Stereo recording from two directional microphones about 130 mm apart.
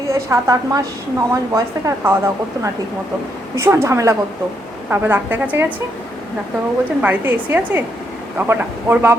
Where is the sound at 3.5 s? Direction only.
20° right (ahead or behind).